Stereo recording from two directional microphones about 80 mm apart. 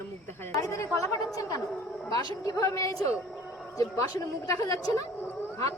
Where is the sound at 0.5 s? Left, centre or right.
Left.